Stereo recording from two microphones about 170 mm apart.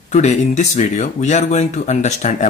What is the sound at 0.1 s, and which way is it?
Speech, 40° left (ahead or behind).